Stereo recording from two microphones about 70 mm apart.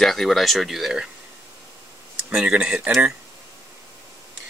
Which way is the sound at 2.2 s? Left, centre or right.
Centre.